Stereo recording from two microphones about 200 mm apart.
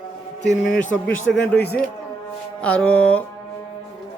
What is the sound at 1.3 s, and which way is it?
A man's voice, 5° left (ahead or behind).